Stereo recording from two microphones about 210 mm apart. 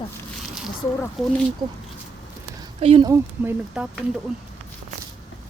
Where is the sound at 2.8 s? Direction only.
25° right (ahead or behind).